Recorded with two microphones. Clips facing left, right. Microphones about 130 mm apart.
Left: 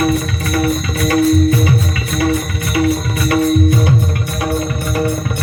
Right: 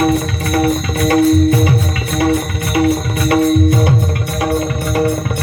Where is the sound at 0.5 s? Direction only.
50° right (ahead or behind).